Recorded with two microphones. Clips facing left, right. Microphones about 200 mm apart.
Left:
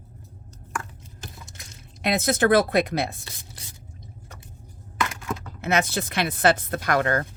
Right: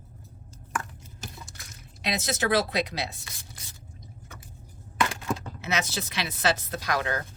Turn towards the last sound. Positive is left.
turn(degrees=55)  # may be behind; listen again after turning